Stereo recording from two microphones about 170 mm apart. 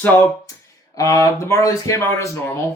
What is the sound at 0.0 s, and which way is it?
Speech, 10° left (ahead or behind).